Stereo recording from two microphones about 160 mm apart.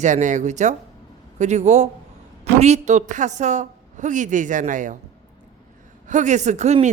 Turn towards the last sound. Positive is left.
turn(degrees=-45)  # may be behind; listen again after turning